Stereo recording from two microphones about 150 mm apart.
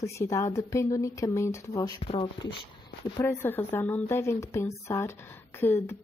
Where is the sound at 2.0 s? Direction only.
40° left (ahead or behind).